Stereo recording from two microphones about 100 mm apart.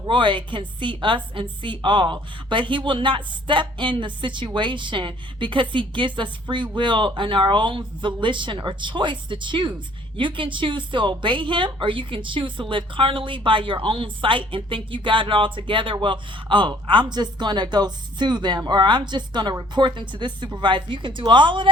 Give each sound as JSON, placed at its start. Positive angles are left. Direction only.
{"t": 0.0, "sound": "a woman's voice", "side_deg": -55}